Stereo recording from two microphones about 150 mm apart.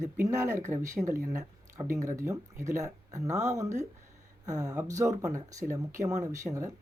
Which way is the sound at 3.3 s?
50° right (ahead or behind).